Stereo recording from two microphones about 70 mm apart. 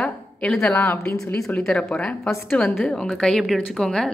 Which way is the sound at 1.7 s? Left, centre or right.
Centre.